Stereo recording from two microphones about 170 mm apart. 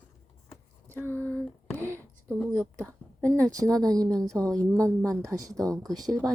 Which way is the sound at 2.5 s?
15° right (ahead or behind).